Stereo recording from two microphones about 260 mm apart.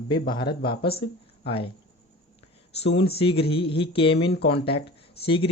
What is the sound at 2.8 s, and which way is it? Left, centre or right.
Speech, left.